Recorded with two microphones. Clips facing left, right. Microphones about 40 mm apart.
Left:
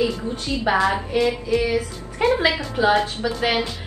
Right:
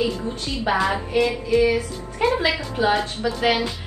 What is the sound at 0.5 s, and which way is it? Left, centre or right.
Speech, centre.